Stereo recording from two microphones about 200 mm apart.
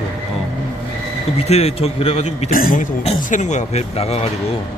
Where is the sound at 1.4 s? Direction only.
30° left (ahead or behind).